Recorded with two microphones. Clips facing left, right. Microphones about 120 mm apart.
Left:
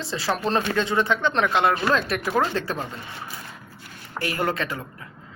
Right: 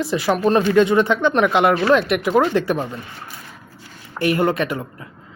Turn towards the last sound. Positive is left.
turn(degrees=-20)  # may be behind; listen again after turning